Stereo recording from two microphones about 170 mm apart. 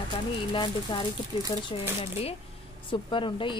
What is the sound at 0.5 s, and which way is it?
Speech, 25° left (ahead or behind).